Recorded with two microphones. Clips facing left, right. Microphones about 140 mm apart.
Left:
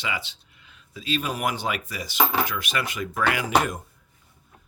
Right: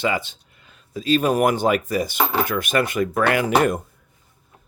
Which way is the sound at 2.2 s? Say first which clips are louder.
Left 1 dB; centre (ahead or behind).